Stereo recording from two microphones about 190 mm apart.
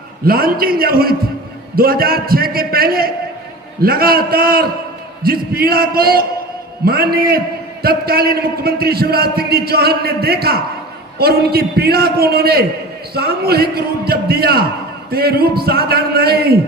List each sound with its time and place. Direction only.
0.3 s a man's voice: 50° right (ahead or behind)